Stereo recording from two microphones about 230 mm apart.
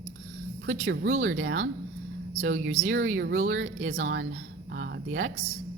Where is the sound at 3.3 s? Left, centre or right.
Right.